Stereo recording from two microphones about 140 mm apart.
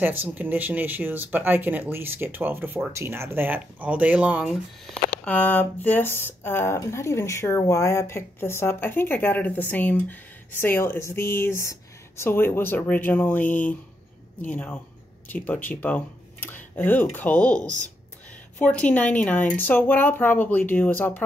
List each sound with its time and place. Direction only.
0.0 s speech: 15° right (ahead or behind)
4.9 s speech: 10° left (ahead or behind)